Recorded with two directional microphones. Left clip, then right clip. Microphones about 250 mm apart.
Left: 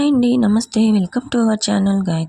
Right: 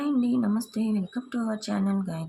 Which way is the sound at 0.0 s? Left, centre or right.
Left.